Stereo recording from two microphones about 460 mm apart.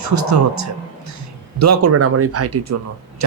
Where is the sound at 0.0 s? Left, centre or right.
Right.